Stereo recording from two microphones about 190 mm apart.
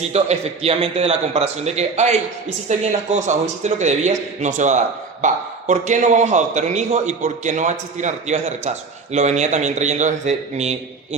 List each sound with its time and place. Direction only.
0.1 s a man's voice: 35° right (ahead or behind)